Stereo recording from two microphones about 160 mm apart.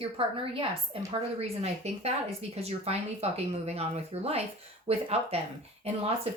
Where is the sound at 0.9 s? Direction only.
35° right (ahead or behind).